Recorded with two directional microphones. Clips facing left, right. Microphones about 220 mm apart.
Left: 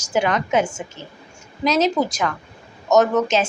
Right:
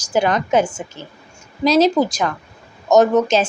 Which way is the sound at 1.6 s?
35° right (ahead or behind).